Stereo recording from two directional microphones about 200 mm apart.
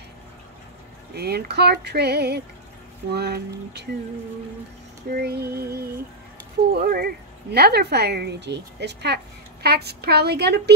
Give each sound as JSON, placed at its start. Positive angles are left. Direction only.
{"t": 1.1, "sound": "speech", "side_deg": -55}
{"t": 5.1, "sound": "music", "side_deg": -55}
{"t": 7.5, "sound": "speech", "side_deg": -55}